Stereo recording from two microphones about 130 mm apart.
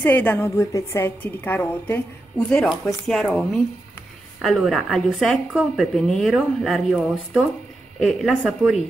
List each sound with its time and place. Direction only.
0.0 s a woman's voice: 15° left (ahead or behind); by 8.7 s centre (ahead or behind)